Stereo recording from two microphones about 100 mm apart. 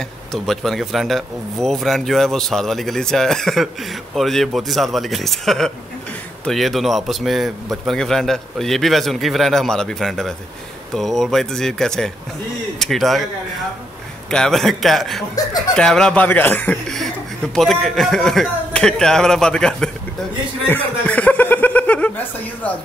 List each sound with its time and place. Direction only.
0.3 s speech: 5° left (ahead or behind)
14.3 s speech: 5° left (ahead or behind)
16.3 s speech: 20° left (ahead or behind)
16.8 s chuckle: 5° left (ahead or behind)
17.6 s speech: 5° left (ahead or behind)
21.0 s chuckle: 15° left (ahead or behind)